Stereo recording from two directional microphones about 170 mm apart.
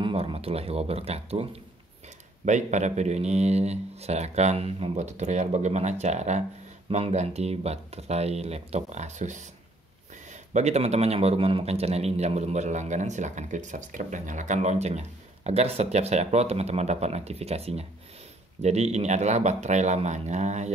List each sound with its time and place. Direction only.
0.0 s a man's voice: 30° right (ahead or behind)